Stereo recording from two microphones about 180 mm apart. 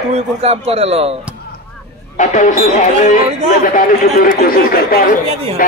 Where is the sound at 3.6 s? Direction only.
50° left (ahead or behind).